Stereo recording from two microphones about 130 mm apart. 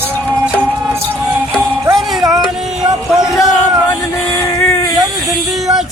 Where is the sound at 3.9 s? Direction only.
20° left (ahead or behind).